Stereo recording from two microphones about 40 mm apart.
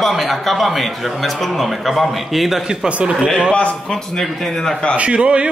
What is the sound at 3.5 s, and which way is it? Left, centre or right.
Speech, left.